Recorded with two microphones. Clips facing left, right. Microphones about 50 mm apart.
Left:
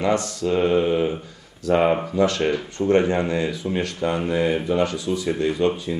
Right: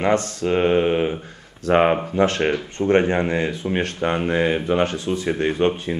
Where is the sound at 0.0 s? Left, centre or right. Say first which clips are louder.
Right 2 dB; right.